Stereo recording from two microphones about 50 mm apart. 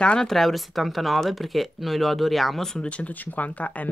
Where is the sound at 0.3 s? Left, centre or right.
Centre.